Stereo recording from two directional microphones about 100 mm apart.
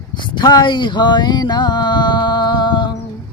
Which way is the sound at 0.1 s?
50° left (ahead or behind).